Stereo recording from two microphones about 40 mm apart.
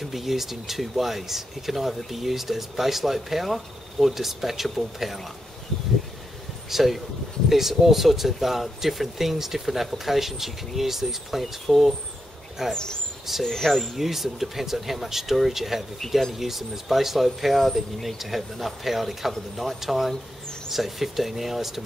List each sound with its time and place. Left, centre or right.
0.0 s speech: centre
6.7 s speech: centre
12.7 s speech: centre
13.4 s speech: centre
13.7 s speech: centre